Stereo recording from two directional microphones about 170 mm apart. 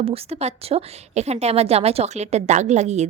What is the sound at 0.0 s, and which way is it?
A woman's voice, 35° right (ahead or behind).